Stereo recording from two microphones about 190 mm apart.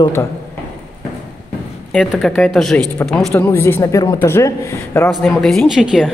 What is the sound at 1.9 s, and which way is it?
Speech, centre (ahead or behind).